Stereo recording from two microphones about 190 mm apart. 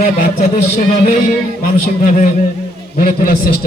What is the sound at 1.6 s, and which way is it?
Speech, 40° left (ahead or behind).